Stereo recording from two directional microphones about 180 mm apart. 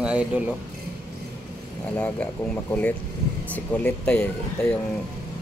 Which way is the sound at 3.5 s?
10° left (ahead or behind).